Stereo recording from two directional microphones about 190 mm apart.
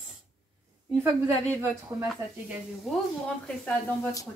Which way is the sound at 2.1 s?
Centre (ahead or behind).